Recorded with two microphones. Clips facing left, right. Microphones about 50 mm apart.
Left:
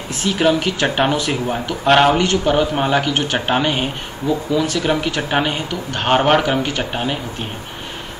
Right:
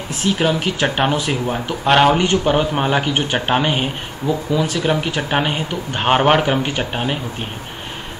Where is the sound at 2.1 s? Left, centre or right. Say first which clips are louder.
Even; centre.